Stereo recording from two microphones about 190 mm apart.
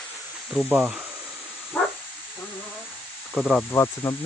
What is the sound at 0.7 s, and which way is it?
Speech, 5° right (ahead or behind).